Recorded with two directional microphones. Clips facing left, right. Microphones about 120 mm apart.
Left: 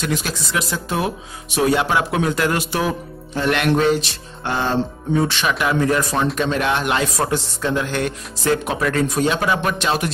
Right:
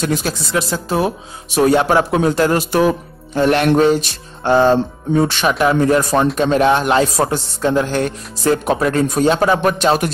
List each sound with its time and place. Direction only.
0.0 s speech: 35° right (ahead or behind)